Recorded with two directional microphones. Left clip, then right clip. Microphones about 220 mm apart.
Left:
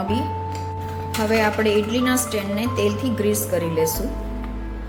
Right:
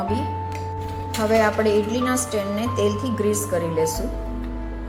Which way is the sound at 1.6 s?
15° left (ahead or behind).